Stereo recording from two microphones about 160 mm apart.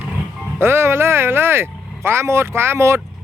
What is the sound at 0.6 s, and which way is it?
Speech, 15° right (ahead or behind).